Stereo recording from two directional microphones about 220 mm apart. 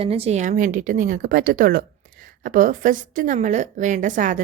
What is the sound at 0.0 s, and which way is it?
A woman's voice, 25° right (ahead or behind).